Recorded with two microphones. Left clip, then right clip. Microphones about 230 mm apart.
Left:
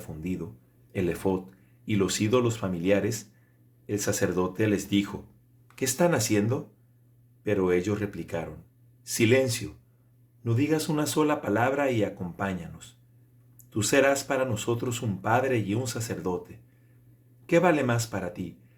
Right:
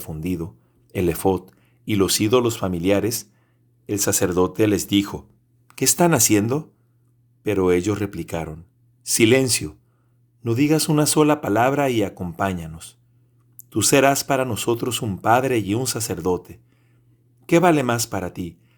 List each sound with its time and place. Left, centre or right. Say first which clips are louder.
0.0 s speech: right 7 dB; right